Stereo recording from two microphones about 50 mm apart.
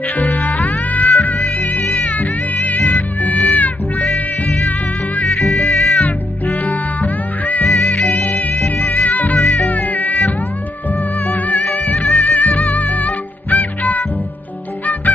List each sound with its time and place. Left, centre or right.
0.3 s insect: left
0.7 s cat: left
2.0 s music: left
5.4 s music: centre
5.9 s music: left
7.6 s music: centre
8.0 s music: left
9.7 s cat: left
10.9 s music: left